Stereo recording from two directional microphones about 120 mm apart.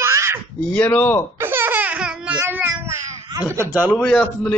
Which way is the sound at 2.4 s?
20° right (ahead or behind).